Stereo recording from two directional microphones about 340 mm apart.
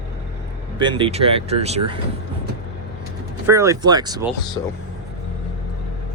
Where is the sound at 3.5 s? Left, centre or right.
Centre.